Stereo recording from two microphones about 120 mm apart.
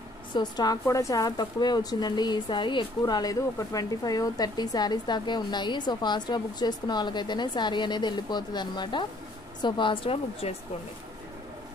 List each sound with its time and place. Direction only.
0.3 s a woman's voice: 35° left (ahead or behind)